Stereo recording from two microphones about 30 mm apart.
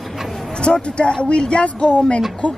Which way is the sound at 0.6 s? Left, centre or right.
Left.